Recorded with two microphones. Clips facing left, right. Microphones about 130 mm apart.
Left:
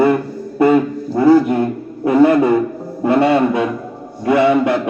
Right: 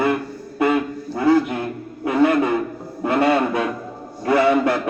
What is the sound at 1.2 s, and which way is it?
Speech, 35° left (ahead or behind).